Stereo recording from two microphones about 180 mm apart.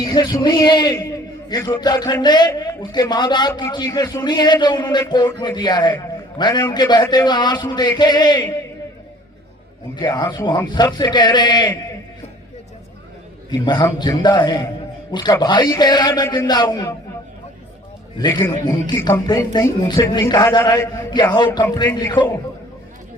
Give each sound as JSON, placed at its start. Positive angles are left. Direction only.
{"t": 0.0, "sound": "a man's voice", "side_deg": 25}
{"t": 9.9, "sound": "a man's voice", "side_deg": 25}
{"t": 13.5, "sound": "a man's voice", "side_deg": 25}
{"t": 18.2, "sound": "a man's voice", "side_deg": 25}
{"t": 19.5, "sound": "a man's voice", "side_deg": 25}